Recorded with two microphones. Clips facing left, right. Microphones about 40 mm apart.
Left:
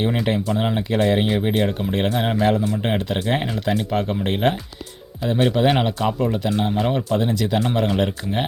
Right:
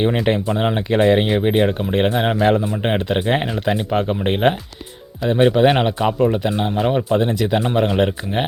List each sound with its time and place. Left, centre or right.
0.4 s speech: right
1.3 s speech: right
7.1 s speech: right